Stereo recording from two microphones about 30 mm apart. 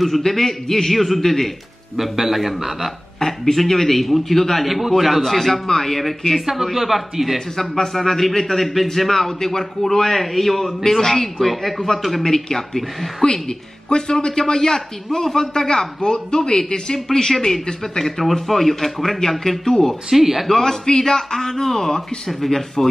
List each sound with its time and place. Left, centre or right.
0.2 s a man's voice: centre
2.0 s a man's voice: centre
3.2 s a man's voice: centre
7.3 s a man's voice: centre
10.0 s a man's voice: centre
10.8 s a man's voice: centre
11.3 s a man's voice: centre
13.2 s speech: left
15.5 s a man's voice: left
20.1 s a man's voice: centre
20.4 s a man's voice: centre